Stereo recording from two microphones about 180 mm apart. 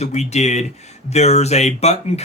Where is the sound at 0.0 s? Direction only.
40° left (ahead or behind).